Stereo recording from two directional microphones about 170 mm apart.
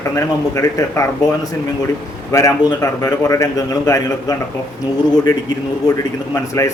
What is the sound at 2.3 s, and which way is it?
A man's voice, 20° left (ahead or behind).